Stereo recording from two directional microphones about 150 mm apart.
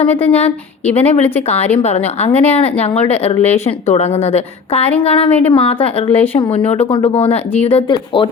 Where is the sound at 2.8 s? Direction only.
45° left (ahead or behind).